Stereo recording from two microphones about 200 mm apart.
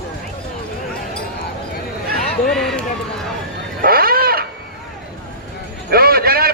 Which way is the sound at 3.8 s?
50° right (ahead or behind).